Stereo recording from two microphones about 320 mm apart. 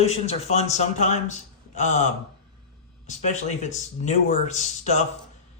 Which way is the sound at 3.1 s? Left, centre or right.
Left.